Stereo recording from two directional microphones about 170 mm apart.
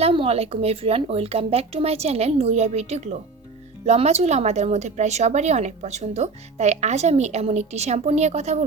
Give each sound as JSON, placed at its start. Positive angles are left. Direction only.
{"t": 0.0, "sound": "a woman's voice", "side_deg": -35}